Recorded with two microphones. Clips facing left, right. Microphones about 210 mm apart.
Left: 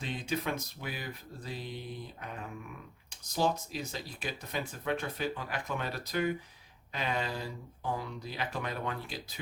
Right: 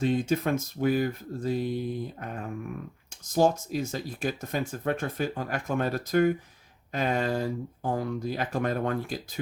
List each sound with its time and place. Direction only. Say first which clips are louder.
0.0 s speech: right 10 dB; 45° right (ahead or behind)